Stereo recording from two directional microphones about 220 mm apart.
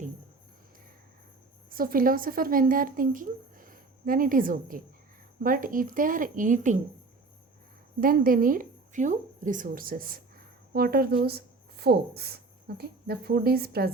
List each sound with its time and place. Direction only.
1.7 s a woman's voice: 40° right (ahead or behind)
8.0 s speech: 40° right (ahead or behind)